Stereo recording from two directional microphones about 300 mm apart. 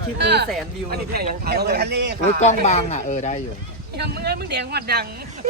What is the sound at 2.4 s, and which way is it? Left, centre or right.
Speech, left.